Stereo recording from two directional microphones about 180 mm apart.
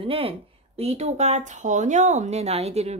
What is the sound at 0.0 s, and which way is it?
Speech, 30° right (ahead or behind).